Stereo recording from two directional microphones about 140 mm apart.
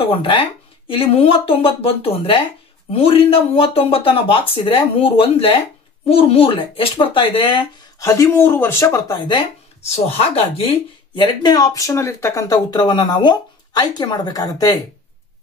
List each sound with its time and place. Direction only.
0.0 s speech: 40° left (ahead or behind)
8.0 s speech: 20° left (ahead or behind)
9.8 s speech: 50° left (ahead or behind)
11.1 s speech: 30° left (ahead or behind)